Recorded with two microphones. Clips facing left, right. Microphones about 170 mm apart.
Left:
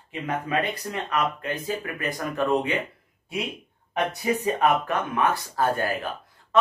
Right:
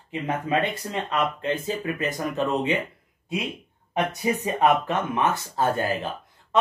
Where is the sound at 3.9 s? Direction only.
20° right (ahead or behind).